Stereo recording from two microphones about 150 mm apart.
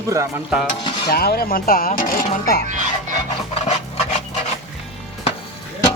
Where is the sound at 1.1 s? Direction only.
90° left.